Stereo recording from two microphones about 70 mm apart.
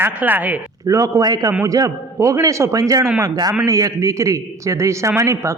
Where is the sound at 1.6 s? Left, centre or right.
Right.